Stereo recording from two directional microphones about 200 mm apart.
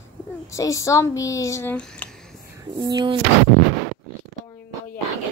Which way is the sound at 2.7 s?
20° right (ahead or behind).